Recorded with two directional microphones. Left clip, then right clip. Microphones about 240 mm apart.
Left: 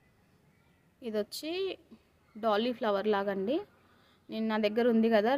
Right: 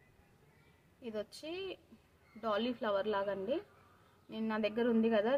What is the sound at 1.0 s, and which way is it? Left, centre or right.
A woman's voice, left.